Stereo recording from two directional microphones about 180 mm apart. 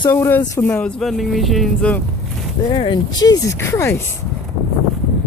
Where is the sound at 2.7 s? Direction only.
25° left (ahead or behind).